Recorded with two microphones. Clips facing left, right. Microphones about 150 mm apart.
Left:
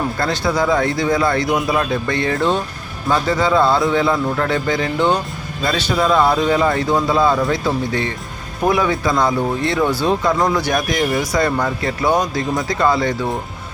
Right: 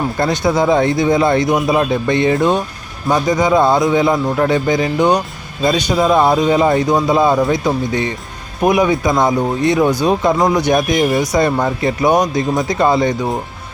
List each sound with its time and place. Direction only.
0.2 s a man's voice: 20° right (ahead or behind)